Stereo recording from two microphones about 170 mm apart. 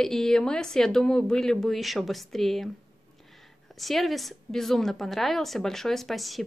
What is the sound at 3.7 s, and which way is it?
A woman's voice, centre (ahead or behind).